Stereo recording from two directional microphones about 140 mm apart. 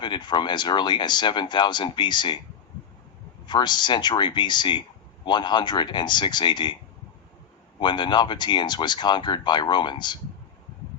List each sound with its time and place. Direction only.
0.0 s speech: 30° left (ahead or behind)
3.4 s speech: 30° left (ahead or behind)
7.8 s speech: 35° left (ahead or behind)